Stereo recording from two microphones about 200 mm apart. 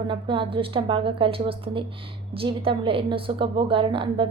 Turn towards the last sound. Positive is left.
turn(degrees=-25)  # may be behind; listen again after turning